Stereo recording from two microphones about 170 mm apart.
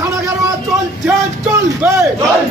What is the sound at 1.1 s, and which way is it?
Speech, 15° right (ahead or behind).